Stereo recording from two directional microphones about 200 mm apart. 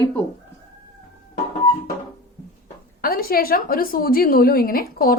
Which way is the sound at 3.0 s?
50° left (ahead or behind).